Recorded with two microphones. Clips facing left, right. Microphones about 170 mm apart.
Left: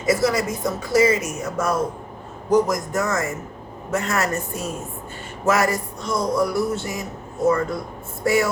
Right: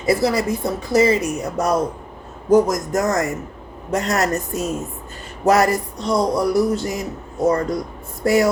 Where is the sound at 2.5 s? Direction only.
45° right (ahead or behind).